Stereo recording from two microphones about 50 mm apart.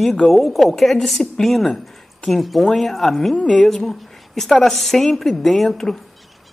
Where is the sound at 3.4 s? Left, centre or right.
Centre.